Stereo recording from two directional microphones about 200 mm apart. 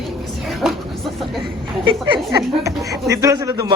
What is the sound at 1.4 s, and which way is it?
Speech, 25° right (ahead or behind).